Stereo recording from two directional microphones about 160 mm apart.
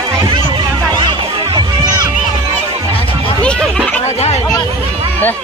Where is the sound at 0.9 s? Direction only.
30° right (ahead or behind).